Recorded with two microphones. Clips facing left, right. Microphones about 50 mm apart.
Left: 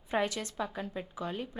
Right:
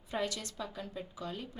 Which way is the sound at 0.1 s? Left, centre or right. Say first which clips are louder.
Left 5 dB; left.